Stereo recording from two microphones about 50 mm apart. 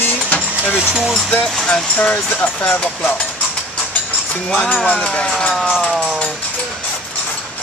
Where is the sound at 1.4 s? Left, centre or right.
Centre.